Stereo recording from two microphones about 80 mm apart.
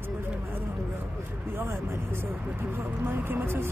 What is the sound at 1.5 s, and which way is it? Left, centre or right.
Speech, right.